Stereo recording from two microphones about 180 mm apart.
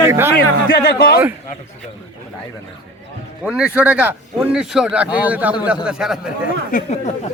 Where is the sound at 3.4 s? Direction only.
5° right (ahead or behind).